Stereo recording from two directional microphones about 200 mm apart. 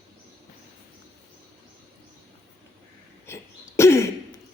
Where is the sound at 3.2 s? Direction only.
15° left (ahead or behind).